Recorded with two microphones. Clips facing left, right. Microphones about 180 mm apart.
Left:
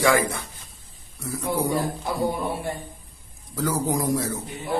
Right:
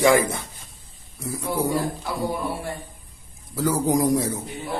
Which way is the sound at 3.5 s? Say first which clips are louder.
Right 3 dB; 10° right (ahead or behind).